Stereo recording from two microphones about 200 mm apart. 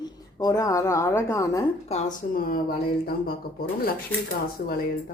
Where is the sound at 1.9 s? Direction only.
40° left (ahead or behind).